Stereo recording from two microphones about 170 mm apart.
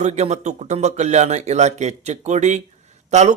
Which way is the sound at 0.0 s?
40° right (ahead or behind).